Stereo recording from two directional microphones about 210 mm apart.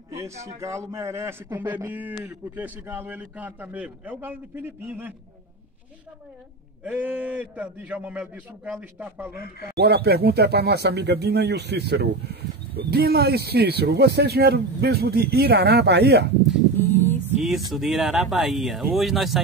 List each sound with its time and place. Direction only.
0.6 s a man's voice: 15° right (ahead or behind)
6.8 s a man's voice: 5° right (ahead or behind)
9.8 s speech: 50° right (ahead or behind)
16.4 s dog: 10° left (ahead or behind)
17.7 s speech: centre (ahead or behind)